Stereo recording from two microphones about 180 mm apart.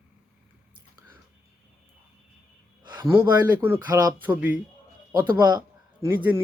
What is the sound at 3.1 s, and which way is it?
Speech, 15° right (ahead or behind).